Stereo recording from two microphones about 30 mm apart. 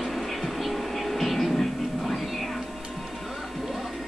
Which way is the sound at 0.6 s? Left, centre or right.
Centre.